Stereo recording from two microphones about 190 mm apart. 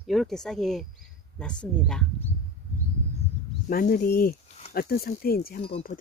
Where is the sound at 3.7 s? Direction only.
50° left (ahead or behind).